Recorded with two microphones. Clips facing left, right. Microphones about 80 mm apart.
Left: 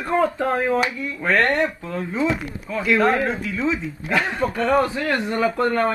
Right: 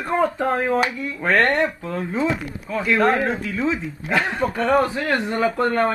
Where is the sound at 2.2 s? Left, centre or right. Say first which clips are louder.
Even; centre.